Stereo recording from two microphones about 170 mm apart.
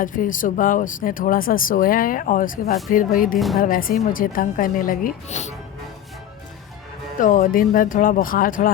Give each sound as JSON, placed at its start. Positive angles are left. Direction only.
{"t": 0.0, "sound": "speech", "side_deg": 50}
{"t": 3.3, "sound": "a woman's voice", "side_deg": 0}
{"t": 3.6, "sound": "speech", "side_deg": 55}
{"t": 7.2, "sound": "speech", "side_deg": 50}